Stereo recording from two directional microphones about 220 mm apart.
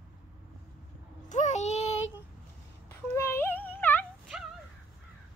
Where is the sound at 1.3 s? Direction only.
30° left (ahead or behind).